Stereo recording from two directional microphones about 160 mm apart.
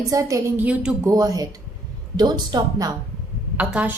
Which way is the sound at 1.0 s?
20° right (ahead or behind).